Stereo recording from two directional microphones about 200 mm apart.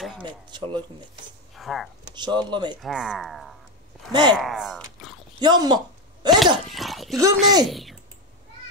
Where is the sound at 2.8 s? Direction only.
5° right (ahead or behind).